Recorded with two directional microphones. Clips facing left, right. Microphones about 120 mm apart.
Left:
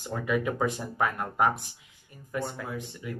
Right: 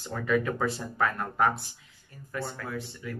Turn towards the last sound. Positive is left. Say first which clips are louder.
# even
turn(degrees=20)  # may be behind; listen again after turning